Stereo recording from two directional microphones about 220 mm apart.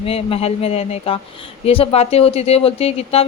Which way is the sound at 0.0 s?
25° left (ahead or behind).